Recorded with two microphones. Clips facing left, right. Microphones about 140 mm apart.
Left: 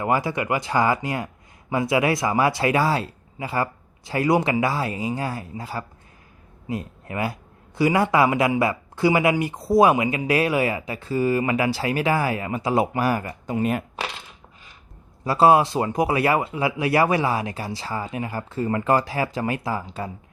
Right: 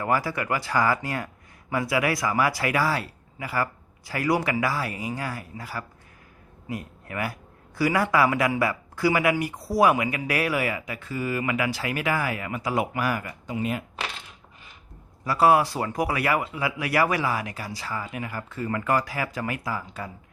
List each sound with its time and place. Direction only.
0.0 s a man's voice: 20° left (ahead or behind)
13.5 s speech: 50° left (ahead or behind)
15.2 s speech: 25° left (ahead or behind)